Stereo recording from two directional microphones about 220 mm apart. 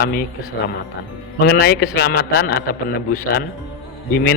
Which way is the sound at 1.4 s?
45° left (ahead or behind).